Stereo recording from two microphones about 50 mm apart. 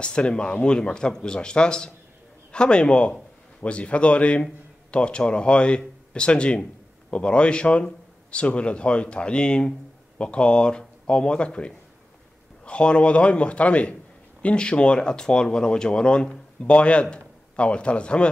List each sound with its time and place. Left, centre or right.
0.0 s a man's voice: centre